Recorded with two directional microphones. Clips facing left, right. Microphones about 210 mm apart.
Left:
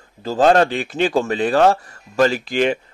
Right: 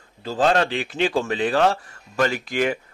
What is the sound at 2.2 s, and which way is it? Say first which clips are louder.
Speech: left 4 dB; 30° left (ahead or behind).